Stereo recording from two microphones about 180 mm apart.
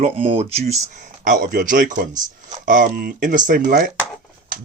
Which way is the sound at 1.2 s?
50° right (ahead or behind).